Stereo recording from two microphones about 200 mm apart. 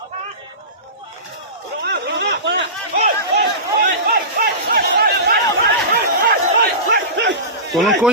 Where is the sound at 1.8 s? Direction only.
60° right (ahead or behind).